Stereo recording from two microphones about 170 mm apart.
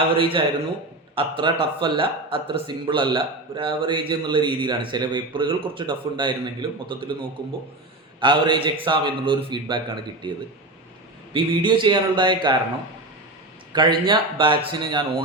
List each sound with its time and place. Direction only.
0.2 s a man's voice: 30° right (ahead or behind)
11.3 s speech: 30° right (ahead or behind)
13.7 s speech: 25° right (ahead or behind)